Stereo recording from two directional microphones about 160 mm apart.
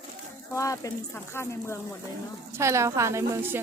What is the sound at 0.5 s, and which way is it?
Speech, 20° left (ahead or behind).